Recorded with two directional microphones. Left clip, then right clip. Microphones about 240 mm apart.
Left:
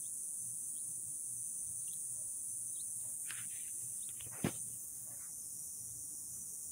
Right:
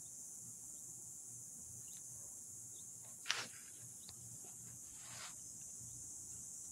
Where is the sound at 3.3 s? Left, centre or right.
Right.